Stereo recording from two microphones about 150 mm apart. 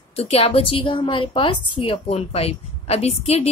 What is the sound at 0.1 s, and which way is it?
A woman's voice, 45° left (ahead or behind).